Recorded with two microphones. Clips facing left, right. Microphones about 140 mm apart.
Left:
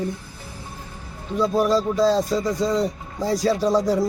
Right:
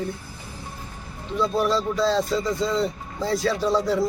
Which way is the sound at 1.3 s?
40° left (ahead or behind).